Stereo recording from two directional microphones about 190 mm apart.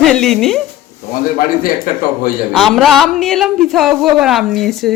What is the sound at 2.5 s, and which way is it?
Speech, centre (ahead or behind).